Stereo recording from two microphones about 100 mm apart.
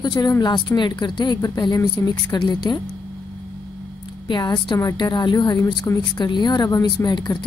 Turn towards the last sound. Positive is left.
turn(degrees=45)  # may be behind; listen again after turning